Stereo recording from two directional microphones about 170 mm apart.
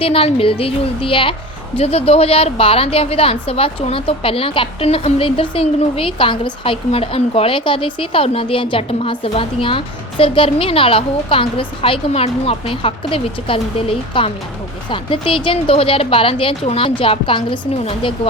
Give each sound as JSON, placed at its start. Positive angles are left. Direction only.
{"t": 0.0, "sound": "a woman's voice", "side_deg": 35}